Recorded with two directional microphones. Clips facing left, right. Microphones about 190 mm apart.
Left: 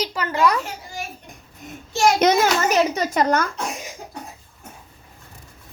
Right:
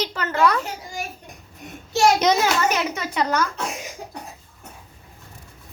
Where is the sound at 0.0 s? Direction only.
10° left (ahead or behind).